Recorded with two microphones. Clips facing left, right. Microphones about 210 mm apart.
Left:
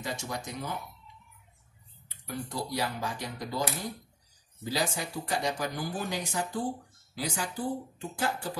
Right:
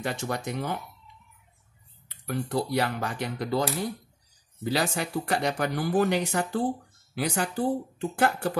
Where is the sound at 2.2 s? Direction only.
65° right (ahead or behind).